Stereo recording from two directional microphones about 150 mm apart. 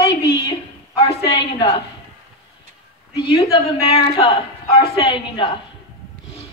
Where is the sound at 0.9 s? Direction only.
40° left (ahead or behind).